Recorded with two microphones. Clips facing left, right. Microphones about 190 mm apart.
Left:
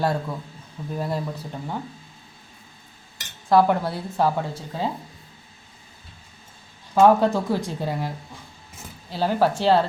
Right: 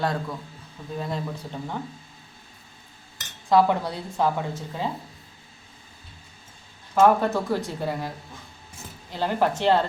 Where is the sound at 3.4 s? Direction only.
5° left (ahead or behind).